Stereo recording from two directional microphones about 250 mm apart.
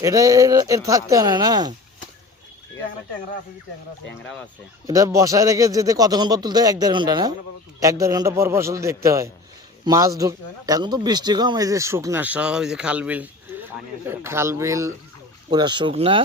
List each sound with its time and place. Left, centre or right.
0.0 s speech: centre
4.9 s speech: centre